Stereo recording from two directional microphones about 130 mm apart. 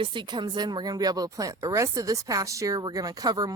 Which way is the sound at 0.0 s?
40° right (ahead or behind).